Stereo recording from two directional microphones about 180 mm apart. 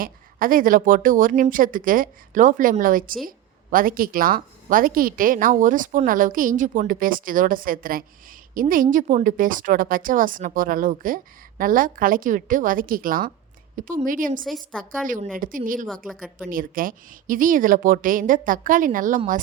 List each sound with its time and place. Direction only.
0.0 s a woman's voice: 50° right (ahead or behind)
14.4 s a woman's voice: centre (ahead or behind)
15.0 s a woman's voice: 45° right (ahead or behind)
15.9 s a woman's voice: centre (ahead or behind)
16.5 s a woman's voice: 50° right (ahead or behind)